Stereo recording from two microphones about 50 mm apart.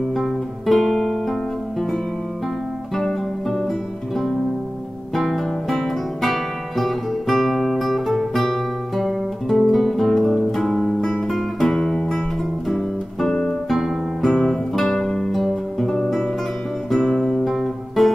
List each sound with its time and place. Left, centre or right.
0.1 s guitar: centre
3.0 s music: centre
5.1 s music: centre
13.7 s guitar: centre
14.3 s guitar: centre
15.3 s music: centre
16.9 s guitar: centre